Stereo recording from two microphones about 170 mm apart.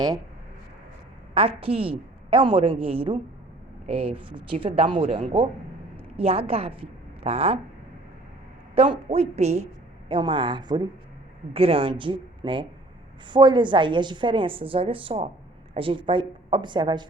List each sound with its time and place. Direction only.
1.3 s a woman's voice: 35° right (ahead or behind)
8.7 s a woman's voice: 35° right (ahead or behind)
10.1 s a woman's voice: 30° right (ahead or behind)